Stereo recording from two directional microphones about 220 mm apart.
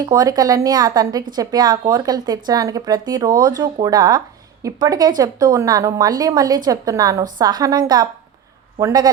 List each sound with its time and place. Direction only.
0.0 s speech: 15° right (ahead or behind)